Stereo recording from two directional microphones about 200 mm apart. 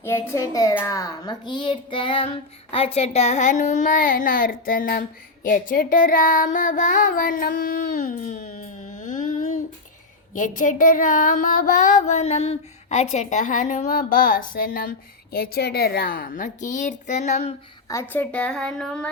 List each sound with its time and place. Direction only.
0.0 s a child's voice: 10° left (ahead or behind); by 17.5 s 35° left (ahead or behind)
17.8 s a woman's voice: 10° left (ahead or behind)